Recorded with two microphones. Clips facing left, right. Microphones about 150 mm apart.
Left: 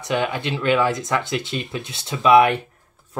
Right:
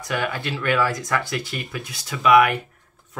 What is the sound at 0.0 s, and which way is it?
Speech, 20° left (ahead or behind).